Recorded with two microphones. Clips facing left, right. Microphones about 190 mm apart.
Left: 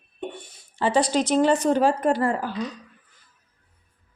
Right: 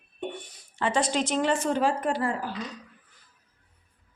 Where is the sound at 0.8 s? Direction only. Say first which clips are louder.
Left 5 dB; 35° left (ahead or behind).